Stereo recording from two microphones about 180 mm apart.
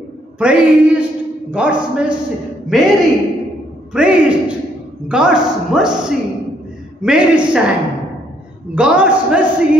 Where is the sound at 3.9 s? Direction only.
5° right (ahead or behind).